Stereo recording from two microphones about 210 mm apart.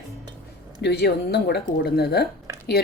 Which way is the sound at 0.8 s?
50° left (ahead or behind).